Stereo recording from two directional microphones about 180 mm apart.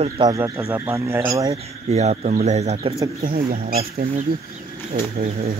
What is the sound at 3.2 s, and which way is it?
Speech, 55° right (ahead or behind).